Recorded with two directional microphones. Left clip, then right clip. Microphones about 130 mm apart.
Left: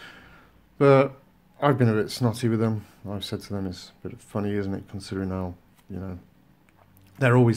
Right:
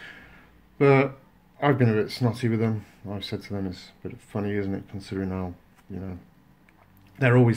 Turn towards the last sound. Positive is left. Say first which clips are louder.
# even
turn(degrees=25)  # may be behind; listen again after turning